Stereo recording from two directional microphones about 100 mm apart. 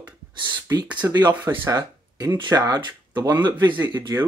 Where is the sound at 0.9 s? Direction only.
15° right (ahead or behind).